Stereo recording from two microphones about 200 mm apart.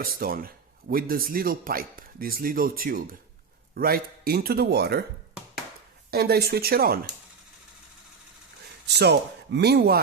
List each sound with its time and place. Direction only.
0.0 s speech: 45° right (ahead or behind)
6.1 s speech: 50° right (ahead or behind)
8.9 s a man's voice: 55° right (ahead or behind)